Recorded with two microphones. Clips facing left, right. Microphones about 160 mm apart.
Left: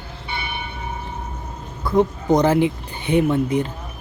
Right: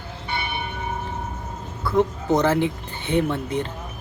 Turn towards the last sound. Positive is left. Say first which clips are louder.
# left 5 dB
turn(degrees=10)  # may be behind; listen again after turning